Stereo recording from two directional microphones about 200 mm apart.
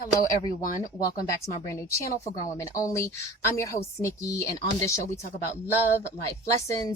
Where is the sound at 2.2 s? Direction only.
15° left (ahead or behind).